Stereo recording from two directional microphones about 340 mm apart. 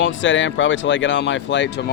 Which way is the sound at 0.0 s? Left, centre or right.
Left.